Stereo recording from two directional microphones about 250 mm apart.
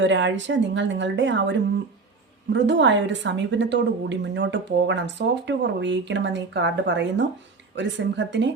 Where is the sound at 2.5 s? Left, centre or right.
Right.